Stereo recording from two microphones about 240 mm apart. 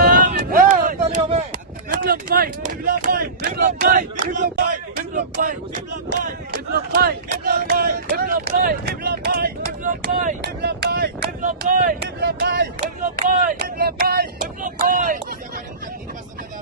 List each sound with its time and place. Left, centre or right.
0.0 s a sound: right
5.1 s speech: right
6.7 s speech: right